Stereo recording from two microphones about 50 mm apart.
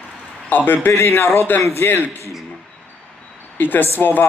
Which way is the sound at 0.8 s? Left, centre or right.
Left.